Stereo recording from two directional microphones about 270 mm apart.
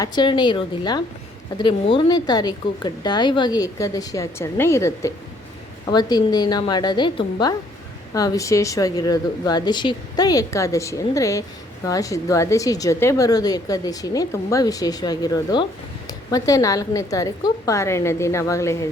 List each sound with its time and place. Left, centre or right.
0.0 s a woman's voice: centre